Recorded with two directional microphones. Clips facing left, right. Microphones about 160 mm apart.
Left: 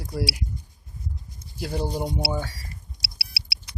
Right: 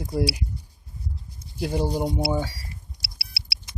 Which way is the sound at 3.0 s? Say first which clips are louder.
Left 1 dB; centre (ahead or behind).